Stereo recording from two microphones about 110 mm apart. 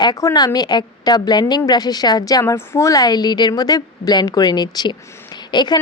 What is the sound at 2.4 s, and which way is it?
A woman's voice, 25° left (ahead or behind).